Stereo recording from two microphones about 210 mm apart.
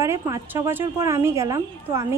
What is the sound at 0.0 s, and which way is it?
A woman's voice, 15° right (ahead or behind).